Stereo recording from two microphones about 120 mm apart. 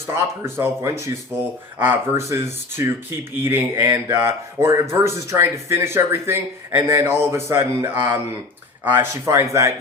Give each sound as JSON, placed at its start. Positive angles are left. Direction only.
{"t": 0.1, "sound": "speech", "side_deg": -20}